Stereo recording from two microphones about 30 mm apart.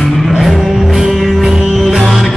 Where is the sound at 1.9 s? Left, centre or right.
Centre.